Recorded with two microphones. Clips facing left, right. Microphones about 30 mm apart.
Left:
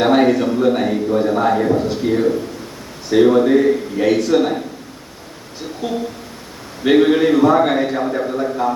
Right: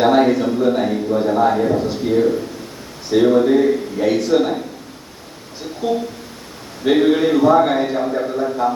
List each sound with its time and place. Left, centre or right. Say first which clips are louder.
0.0 s a man's voice: even; centre
6.8 s a man's voice: left 2 dB; left; by 8.7 s centre